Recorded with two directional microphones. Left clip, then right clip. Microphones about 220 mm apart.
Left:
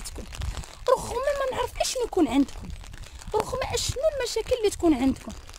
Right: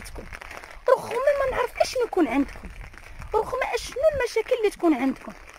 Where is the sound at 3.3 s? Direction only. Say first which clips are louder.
Right 2 dB; 20° left (ahead or behind).